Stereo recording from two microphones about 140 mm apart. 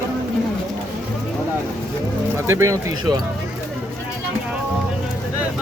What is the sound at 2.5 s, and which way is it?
Speech, 20° right (ahead or behind).